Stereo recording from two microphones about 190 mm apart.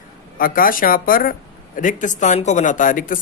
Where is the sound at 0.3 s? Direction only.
50° left (ahead or behind).